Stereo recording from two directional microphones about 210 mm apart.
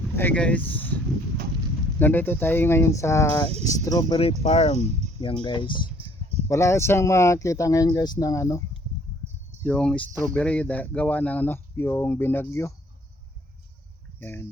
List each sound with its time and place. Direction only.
0.2 s speech: 5° left (ahead or behind)
2.0 s speech: 10° left (ahead or behind)
9.6 s speech: 5° left (ahead or behind)
14.2 s speech: 10° left (ahead or behind)